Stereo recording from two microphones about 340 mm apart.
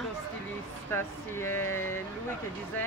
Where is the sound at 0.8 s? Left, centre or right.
Centre.